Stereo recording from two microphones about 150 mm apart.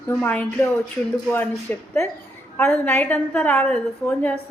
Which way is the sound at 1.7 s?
10° left (ahead or behind).